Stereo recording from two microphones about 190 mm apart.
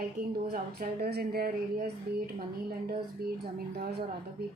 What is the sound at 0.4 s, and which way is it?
Speech, 50° right (ahead or behind).